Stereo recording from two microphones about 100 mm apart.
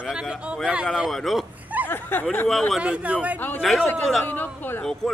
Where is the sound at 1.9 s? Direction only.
20° left (ahead or behind).